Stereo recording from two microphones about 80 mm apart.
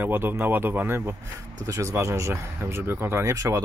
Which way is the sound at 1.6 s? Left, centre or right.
Right.